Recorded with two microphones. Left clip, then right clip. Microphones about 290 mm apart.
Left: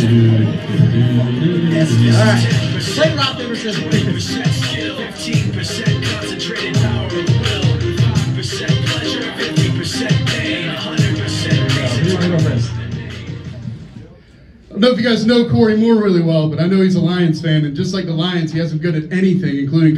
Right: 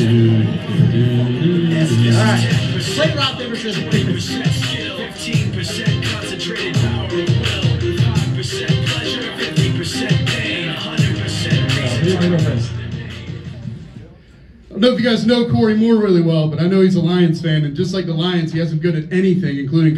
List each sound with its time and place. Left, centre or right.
0.1 s music: centre
14.8 s a man's voice: centre